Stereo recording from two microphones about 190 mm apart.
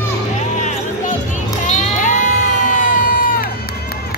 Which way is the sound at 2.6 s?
45° left (ahead or behind).